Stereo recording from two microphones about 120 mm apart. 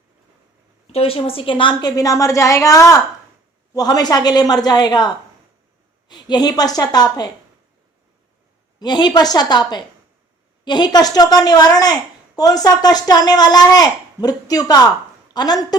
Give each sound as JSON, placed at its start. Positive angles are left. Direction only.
{"t": 0.9, "sound": "a woman's voice", "side_deg": 50}
{"t": 2.0, "sound": "a woman's voice", "side_deg": 30}
{"t": 8.8, "sound": "speech", "side_deg": 35}